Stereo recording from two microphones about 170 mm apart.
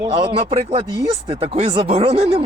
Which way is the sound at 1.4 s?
35° right (ahead or behind).